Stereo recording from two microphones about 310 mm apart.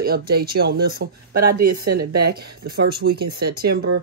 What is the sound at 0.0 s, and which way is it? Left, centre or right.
Speech, right.